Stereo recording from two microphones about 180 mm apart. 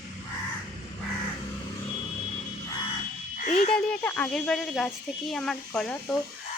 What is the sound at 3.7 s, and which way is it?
Speech, 10° left (ahead or behind).